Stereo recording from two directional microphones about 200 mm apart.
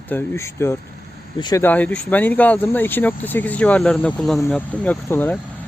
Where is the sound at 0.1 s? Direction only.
10° left (ahead or behind).